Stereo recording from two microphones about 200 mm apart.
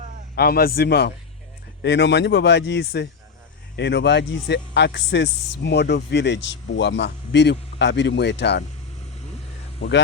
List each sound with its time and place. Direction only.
0.3 s speech: 50° left (ahead or behind)